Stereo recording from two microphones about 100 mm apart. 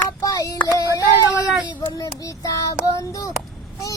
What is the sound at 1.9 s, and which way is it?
Child singing, 35° left (ahead or behind).